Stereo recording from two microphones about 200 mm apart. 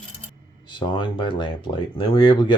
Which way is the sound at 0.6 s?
25° left (ahead or behind).